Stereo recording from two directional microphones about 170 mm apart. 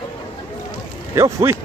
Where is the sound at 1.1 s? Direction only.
15° right (ahead or behind).